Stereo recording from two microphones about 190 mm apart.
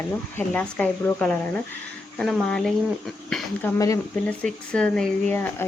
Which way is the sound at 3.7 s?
15° left (ahead or behind).